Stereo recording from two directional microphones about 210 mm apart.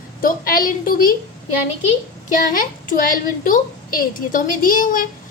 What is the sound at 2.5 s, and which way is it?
A woman's voice, 40° left (ahead or behind).